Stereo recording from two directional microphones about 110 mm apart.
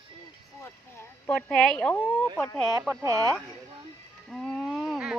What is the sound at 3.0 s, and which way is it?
Speech, 30° right (ahead or behind).